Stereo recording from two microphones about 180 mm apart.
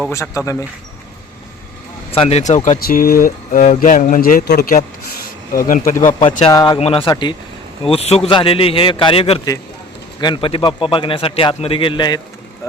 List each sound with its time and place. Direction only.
0.1 s a man's voice: 15° left (ahead or behind)
2.0 s speech: 30° left (ahead or behind)
2.6 s speech: 55° left (ahead or behind)
6.5 s a man's voice: 20° left (ahead or behind)
6.7 s a man's voice: 35° left (ahead or behind)